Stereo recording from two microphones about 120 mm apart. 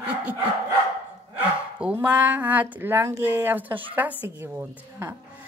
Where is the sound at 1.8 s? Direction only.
10° right (ahead or behind).